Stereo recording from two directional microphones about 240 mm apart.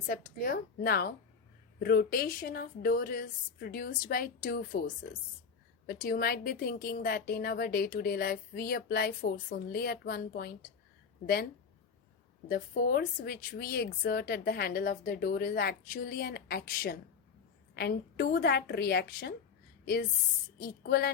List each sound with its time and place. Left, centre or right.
0.1 s a woman's voice: left
12.5 s a woman's voice: left